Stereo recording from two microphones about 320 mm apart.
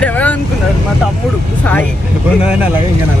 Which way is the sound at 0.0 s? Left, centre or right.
Centre.